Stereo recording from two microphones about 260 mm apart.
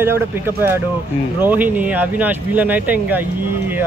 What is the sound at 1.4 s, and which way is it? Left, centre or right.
Speech, centre.